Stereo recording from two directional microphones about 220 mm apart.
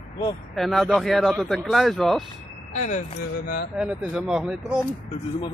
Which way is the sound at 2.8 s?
30° left (ahead or behind).